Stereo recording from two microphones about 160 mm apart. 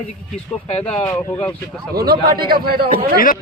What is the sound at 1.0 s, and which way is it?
Speech, 20° left (ahead or behind).